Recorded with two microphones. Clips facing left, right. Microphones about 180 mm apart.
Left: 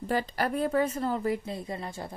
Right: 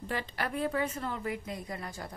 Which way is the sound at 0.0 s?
40° left (ahead or behind).